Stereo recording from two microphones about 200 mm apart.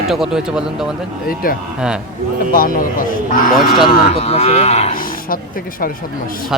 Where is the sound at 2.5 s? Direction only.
45° left (ahead or behind).